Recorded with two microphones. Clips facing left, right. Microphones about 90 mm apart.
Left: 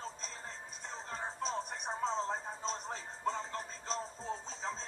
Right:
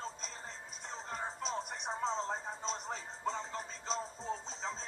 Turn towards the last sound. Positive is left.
turn(degrees=0)  # may be behind; listen again after turning